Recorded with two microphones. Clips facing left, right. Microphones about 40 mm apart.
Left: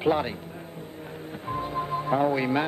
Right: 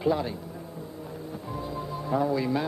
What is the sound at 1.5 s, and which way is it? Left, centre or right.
Music, left.